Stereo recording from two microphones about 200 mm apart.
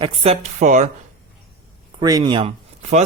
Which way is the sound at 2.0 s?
20° right (ahead or behind).